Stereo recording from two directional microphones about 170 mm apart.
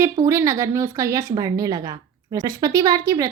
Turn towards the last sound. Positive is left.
turn(degrees=-20)  # may be behind; listen again after turning